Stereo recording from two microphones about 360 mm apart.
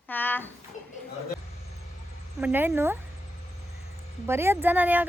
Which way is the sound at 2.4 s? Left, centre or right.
Centre.